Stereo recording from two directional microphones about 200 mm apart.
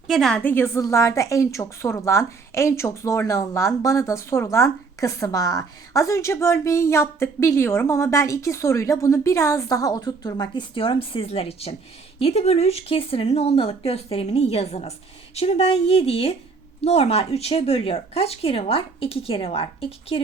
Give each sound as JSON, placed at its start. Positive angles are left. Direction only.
{"t": 0.1, "sound": "a woman's voice", "side_deg": 0}